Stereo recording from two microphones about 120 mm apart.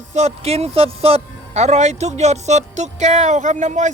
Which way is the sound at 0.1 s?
60° right (ahead or behind).